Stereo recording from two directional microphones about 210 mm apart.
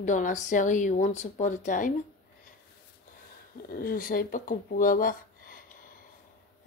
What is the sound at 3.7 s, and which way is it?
Speech, 45° left (ahead or behind).